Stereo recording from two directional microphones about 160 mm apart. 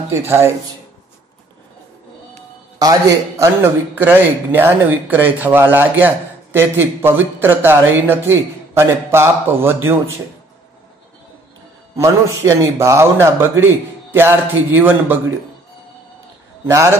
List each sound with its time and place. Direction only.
0.1 s a man's voice: 15° right (ahead or behind)
2.8 s a man's voice: 20° right (ahead or behind)
12.0 s a man's voice: 20° right (ahead or behind)
16.6 s a man's voice: 15° right (ahead or behind)